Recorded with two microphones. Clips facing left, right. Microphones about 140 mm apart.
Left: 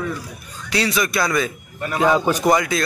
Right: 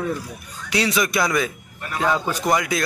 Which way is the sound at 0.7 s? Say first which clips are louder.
Even; 15° right (ahead or behind).